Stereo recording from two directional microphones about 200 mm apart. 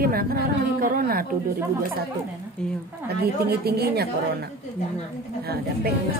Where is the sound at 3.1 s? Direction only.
50° right (ahead or behind).